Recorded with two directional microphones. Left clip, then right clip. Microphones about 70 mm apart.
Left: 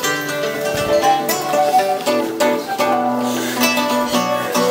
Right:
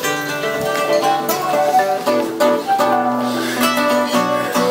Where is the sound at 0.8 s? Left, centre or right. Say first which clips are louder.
Left 2 dB; left.